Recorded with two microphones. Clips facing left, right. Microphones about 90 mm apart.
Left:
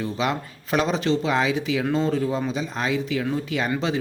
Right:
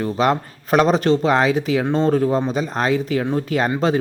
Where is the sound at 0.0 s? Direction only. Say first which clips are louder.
Right 7 dB; 45° right (ahead or behind).